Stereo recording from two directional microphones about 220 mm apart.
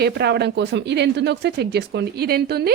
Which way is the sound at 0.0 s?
50° right (ahead or behind).